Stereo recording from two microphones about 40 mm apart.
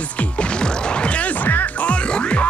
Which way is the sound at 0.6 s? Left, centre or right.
Left.